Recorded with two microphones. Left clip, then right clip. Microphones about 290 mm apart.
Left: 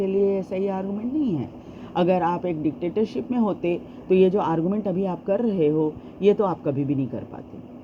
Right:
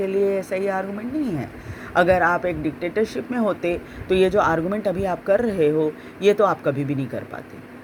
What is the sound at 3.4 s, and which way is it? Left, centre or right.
Speech, right.